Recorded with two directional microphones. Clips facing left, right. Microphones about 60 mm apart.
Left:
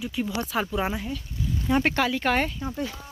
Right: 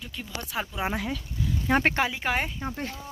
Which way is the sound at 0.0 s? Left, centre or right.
Centre.